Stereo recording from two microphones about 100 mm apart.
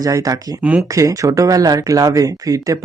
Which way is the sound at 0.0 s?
35° right (ahead or behind).